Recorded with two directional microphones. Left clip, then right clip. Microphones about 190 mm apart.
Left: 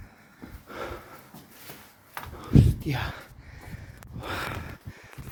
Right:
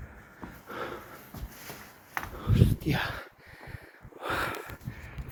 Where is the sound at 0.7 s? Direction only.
20° left (ahead or behind).